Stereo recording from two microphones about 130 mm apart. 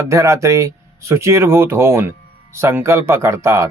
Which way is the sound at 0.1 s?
25° right (ahead or behind).